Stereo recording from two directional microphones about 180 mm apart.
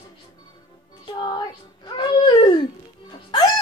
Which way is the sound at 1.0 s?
25° left (ahead or behind).